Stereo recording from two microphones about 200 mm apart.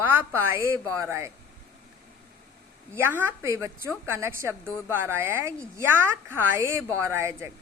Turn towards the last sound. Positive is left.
turn(degrees=-15)  # may be behind; listen again after turning